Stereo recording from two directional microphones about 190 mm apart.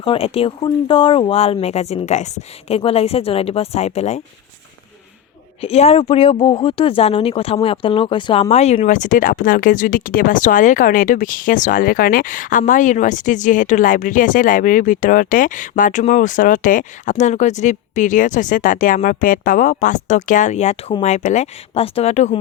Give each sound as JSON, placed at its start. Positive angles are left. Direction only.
{"t": 0.0, "sound": "speech", "side_deg": 30}
{"t": 5.5, "sound": "speech", "side_deg": 35}